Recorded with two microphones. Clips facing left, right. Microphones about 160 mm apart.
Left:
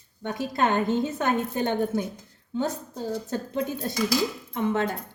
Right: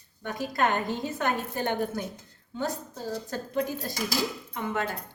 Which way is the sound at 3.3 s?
25° left (ahead or behind).